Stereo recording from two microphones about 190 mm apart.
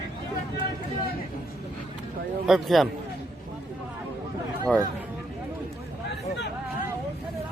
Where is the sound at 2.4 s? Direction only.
Centre (ahead or behind).